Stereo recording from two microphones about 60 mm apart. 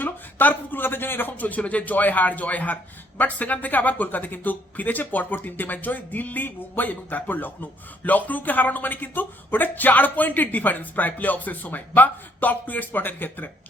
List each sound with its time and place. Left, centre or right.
0.0 s speech: left